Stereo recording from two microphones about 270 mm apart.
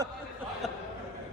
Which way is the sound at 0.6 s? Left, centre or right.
Centre.